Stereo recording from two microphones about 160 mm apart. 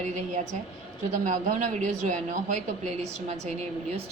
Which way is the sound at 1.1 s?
50° right (ahead or behind).